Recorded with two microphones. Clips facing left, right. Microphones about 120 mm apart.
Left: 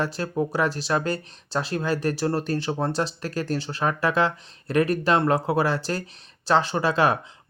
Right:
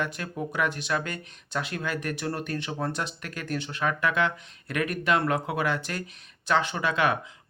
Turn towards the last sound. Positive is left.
turn(degrees=35)  # may be behind; listen again after turning